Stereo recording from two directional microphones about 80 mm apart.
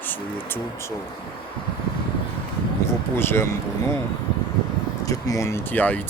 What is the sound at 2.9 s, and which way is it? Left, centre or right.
Speech, left.